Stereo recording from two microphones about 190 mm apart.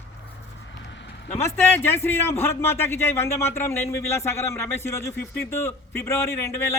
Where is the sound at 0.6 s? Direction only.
75° left (ahead or behind).